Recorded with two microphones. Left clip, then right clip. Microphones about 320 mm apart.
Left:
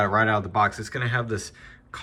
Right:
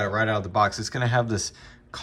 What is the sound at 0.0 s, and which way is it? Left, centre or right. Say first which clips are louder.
Speech: left 3 dB; centre.